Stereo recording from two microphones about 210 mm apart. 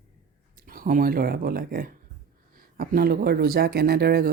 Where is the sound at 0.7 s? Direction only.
40° right (ahead or behind).